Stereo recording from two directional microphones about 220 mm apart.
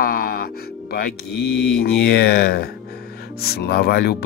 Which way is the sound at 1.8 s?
45° left (ahead or behind).